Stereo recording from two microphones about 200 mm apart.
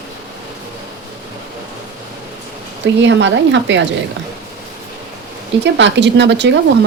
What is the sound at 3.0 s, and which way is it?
Speech, 65° right (ahead or behind).